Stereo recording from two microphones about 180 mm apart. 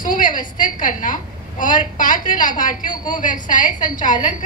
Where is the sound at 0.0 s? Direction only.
50° left (ahead or behind).